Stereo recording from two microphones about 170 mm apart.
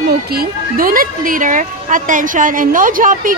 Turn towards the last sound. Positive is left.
turn(degrees=-50)  # may be behind; listen again after turning